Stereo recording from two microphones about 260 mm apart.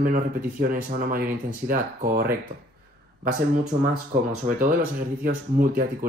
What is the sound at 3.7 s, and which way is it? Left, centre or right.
Speech, right.